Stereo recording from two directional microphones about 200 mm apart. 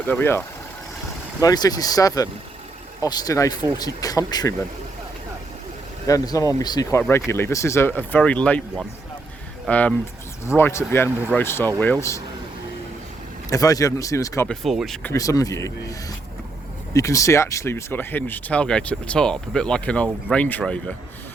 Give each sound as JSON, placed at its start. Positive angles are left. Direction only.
{"t": 0.0, "sound": "speech", "side_deg": 10}
{"t": 6.1, "sound": "speech", "side_deg": 15}
{"t": 9.6, "sound": "speech", "side_deg": 5}
{"t": 13.5, "sound": "speech", "side_deg": 15}
{"t": 14.4, "sound": "speech", "side_deg": 0}
{"t": 15.1, "sound": "speech", "side_deg": 15}